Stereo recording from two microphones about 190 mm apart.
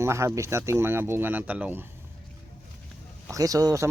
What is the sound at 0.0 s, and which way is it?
Speech, 15° right (ahead or behind).